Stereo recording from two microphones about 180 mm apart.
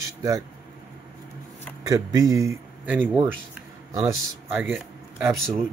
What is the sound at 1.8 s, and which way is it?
Speech, 20° right (ahead or behind).